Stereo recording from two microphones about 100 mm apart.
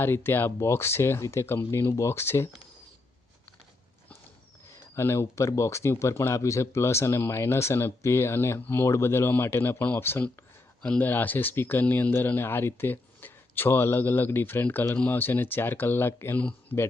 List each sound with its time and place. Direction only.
0.0 s speech: 25° left (ahead or behind)
4.7 s speech: 25° left (ahead or behind)